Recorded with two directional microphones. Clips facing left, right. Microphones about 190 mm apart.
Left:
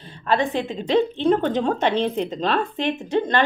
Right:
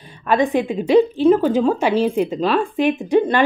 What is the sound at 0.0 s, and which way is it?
A woman's voice, 15° right (ahead or behind).